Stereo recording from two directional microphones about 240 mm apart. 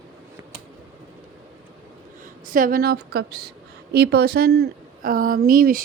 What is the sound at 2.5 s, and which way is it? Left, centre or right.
A woman's voice, right.